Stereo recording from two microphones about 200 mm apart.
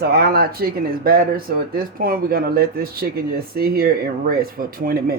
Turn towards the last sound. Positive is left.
turn(degrees=-45)  # may be behind; listen again after turning